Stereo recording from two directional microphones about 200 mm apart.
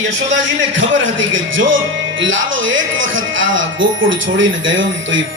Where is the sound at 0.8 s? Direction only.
70° right (ahead or behind).